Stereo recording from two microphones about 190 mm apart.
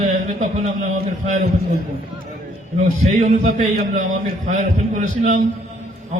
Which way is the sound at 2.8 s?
40° right (ahead or behind).